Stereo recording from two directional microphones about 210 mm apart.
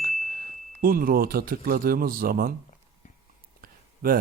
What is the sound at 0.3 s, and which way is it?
Speech, 45° right (ahead or behind).